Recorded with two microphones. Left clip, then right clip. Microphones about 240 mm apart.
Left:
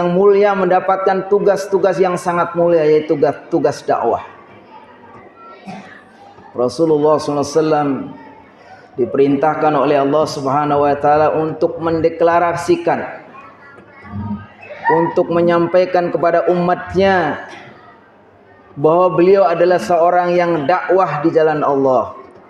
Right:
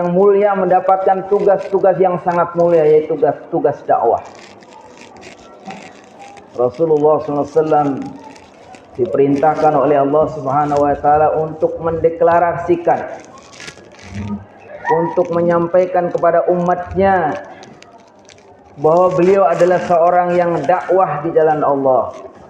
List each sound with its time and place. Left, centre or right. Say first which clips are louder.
0.0 s a man's voice: even; left
6.6 s a man's voice: right 1 dB; left
9.1 s a man's voice: right 1 dB; left
15.1 s a man's voice: left 1 dB; left
18.8 s a man's voice: even; left